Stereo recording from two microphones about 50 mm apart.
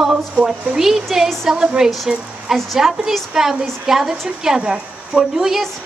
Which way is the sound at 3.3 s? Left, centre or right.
Centre.